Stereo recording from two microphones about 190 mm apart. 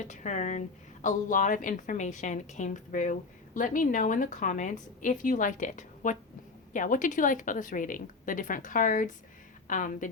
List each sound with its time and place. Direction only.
0.0 s a woman's voice: 40° left (ahead or behind)